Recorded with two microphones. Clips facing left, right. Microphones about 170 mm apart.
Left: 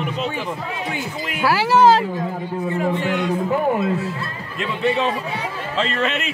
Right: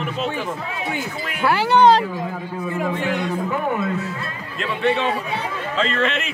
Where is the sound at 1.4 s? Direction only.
5° left (ahead or behind).